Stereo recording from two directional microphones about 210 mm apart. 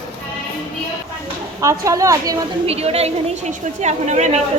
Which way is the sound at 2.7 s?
30° right (ahead or behind).